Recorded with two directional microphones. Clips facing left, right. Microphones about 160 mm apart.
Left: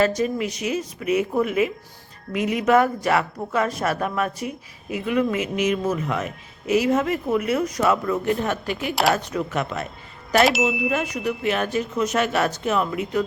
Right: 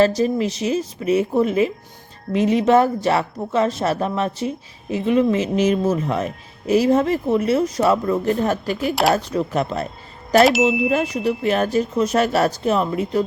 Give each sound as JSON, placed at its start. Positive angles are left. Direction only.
{"t": 0.0, "sound": "speech", "side_deg": -30}
{"t": 10.4, "sound": "speech", "side_deg": 0}
{"t": 10.8, "sound": "speech", "side_deg": -30}